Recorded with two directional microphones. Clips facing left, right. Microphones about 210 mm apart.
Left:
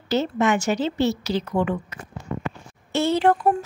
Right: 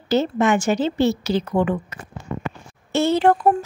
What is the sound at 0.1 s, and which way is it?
Speech, 50° right (ahead or behind).